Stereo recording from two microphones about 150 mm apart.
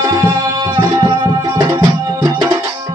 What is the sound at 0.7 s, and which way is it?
Tabla, 25° right (ahead or behind).